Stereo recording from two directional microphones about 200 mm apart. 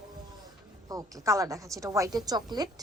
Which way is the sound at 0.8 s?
15° right (ahead or behind).